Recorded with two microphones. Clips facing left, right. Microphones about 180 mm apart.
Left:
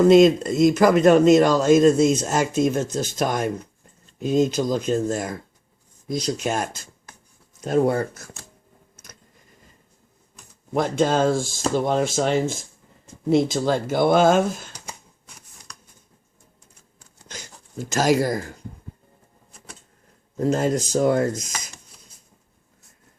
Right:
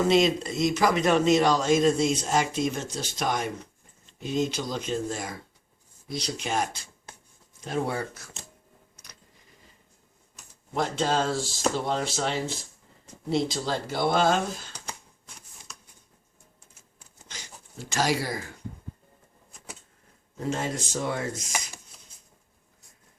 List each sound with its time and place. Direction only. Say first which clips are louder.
0.0 s a man's voice: left 9 dB; 50° left (ahead or behind)
10.8 s a man's voice: left 6 dB; 50° left (ahead or behind)
15.7 s a sound: left 1 dB; 5° right (ahead or behind)
17.3 s speech: left 9 dB; 45° left (ahead or behind)
20.3 s a man's voice: left 9 dB; 45° left (ahead or behind)